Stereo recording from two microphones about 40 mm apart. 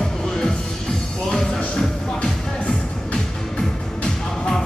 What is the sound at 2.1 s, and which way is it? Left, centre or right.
Music, left.